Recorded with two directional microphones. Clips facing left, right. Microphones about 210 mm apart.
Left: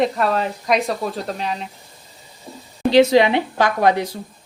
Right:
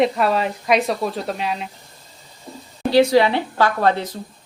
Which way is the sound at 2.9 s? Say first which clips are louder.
Left 1 dB; 20° left (ahead or behind).